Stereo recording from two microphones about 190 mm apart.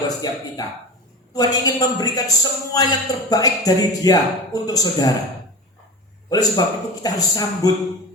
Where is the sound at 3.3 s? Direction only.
20° left (ahead or behind).